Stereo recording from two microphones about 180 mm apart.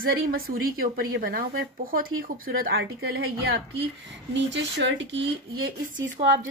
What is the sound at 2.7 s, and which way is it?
A woman's voice, 90° right.